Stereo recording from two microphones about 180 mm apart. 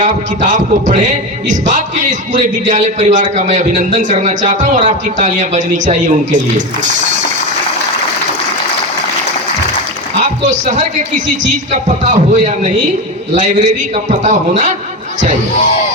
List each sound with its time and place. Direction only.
0.0 s a man's voice: 45° right (ahead or behind)
10.2 s a man's voice: 45° right (ahead or behind)